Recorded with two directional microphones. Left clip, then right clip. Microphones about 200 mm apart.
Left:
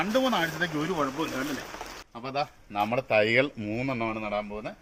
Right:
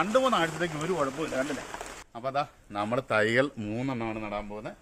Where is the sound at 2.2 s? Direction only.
20° right (ahead or behind).